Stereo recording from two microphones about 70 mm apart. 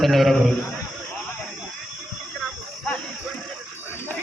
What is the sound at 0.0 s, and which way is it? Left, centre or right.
Speech, centre.